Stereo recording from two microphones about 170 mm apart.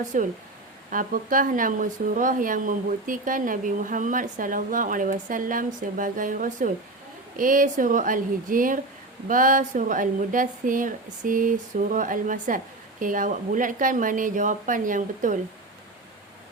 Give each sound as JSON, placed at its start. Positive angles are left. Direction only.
{"t": 0.1, "sound": "speech", "side_deg": -50}